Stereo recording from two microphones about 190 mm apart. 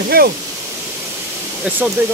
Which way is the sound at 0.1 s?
55° right (ahead or behind).